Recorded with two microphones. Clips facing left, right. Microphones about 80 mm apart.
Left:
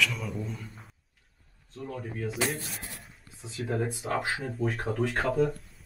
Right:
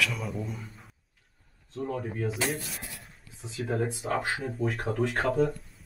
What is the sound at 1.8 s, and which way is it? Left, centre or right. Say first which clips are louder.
Speech: right 5 dB; centre.